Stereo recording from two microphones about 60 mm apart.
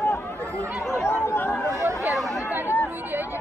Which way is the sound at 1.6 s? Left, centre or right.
Right.